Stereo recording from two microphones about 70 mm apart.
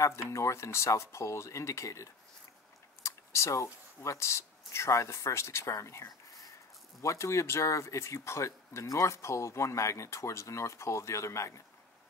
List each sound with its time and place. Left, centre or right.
0.0 s speech: left